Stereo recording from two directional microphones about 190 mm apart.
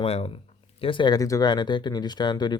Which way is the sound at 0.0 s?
30° left (ahead or behind).